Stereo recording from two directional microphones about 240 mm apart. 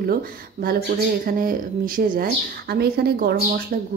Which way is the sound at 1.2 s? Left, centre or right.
Right.